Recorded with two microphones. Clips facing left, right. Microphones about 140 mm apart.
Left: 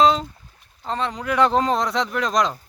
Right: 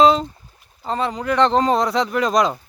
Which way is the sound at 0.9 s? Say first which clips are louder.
Right 3 dB; 5° right (ahead or behind).